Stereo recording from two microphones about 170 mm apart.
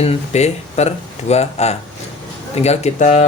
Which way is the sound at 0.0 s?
40° left (ahead or behind).